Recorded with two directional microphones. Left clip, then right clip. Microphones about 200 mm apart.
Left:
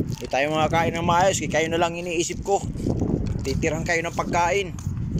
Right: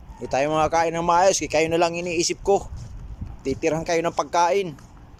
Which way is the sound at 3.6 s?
10° right (ahead or behind).